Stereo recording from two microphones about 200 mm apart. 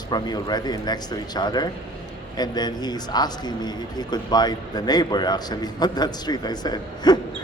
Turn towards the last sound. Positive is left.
turn(degrees=20)  # may be behind; listen again after turning